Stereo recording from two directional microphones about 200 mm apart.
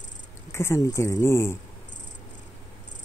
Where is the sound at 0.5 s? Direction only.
15° left (ahead or behind).